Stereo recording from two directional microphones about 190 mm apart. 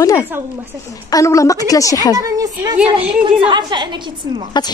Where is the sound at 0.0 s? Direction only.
15° left (ahead or behind).